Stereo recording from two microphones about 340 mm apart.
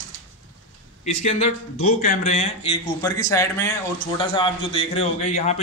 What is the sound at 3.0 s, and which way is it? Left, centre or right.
A man's voice, centre.